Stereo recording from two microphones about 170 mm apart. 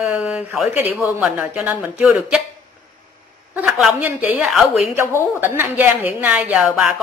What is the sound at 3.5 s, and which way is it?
A woman's voice, 5° right (ahead or behind).